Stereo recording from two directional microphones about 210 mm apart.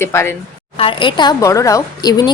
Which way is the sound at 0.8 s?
25° left (ahead or behind).